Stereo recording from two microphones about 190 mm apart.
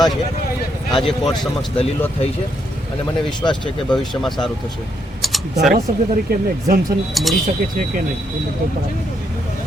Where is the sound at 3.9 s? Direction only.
Centre (ahead or behind).